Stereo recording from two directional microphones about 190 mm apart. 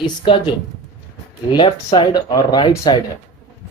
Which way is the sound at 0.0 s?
25° left (ahead or behind).